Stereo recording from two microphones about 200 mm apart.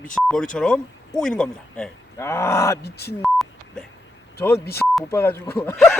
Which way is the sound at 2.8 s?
55° left (ahead or behind).